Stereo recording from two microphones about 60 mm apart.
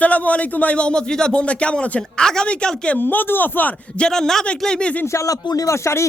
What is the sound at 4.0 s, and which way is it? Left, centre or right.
Music, centre.